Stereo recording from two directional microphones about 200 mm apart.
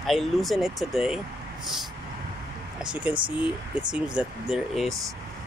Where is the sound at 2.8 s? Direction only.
5° right (ahead or behind).